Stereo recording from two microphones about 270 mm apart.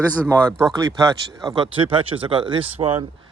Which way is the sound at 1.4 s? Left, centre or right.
Centre.